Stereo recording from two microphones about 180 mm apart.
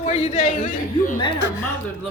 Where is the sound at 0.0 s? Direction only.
35° left (ahead or behind).